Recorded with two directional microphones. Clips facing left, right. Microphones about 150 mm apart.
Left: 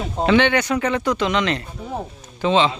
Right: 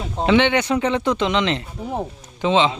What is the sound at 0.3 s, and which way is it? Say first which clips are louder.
Speech: right 1 dB; 20° right (ahead or behind).